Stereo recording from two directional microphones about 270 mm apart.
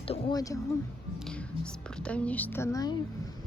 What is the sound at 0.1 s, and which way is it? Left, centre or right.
Speech, centre.